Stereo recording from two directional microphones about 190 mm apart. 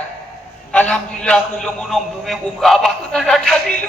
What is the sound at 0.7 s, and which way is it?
A man's voice, 5° left (ahead or behind).